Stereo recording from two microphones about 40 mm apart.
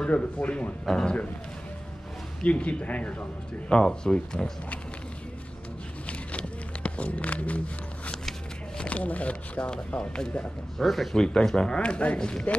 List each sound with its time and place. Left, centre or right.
0.1 s speech: left
0.8 s speech: centre
2.4 s speech: left
3.8 s speech: centre
6.0 s a sound: left
8.7 s speech: left
10.8 s speech: centre
11.1 s speech: left